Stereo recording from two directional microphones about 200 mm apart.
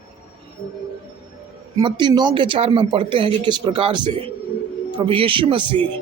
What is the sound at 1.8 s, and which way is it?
Speech, 20° right (ahead or behind).